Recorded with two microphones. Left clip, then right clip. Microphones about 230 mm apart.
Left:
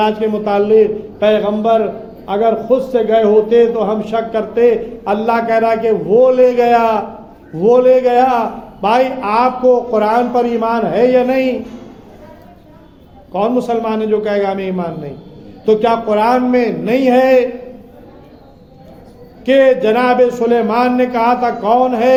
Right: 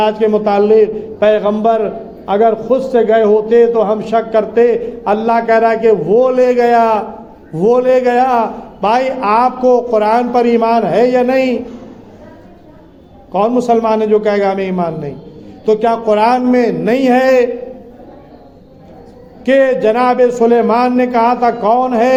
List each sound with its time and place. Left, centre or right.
0.0 s a man's voice: right
13.3 s a man's voice: right
19.5 s a man's voice: right